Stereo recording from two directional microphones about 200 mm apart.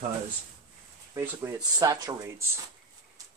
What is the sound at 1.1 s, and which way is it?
Speech, 15° right (ahead or behind).